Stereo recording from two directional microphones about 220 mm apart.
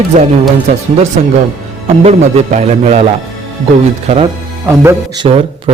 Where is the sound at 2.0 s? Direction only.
30° right (ahead or behind).